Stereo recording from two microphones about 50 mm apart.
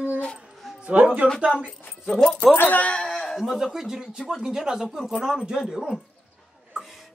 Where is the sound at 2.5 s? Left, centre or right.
Left.